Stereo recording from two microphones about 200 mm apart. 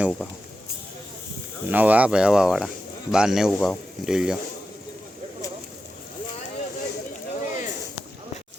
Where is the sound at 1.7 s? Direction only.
10° right (ahead or behind).